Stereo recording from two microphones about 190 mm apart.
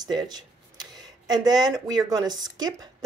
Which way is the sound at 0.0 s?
20° right (ahead or behind).